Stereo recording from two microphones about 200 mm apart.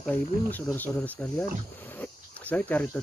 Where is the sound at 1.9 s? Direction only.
10° left (ahead or behind).